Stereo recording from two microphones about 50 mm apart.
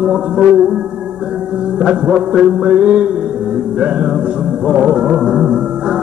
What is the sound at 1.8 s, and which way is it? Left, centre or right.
Music, centre.